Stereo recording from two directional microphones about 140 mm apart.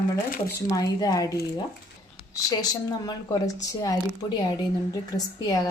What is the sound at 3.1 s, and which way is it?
Speech, 25° left (ahead or behind).